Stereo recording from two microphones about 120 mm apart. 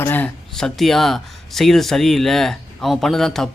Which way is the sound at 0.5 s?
5° left (ahead or behind).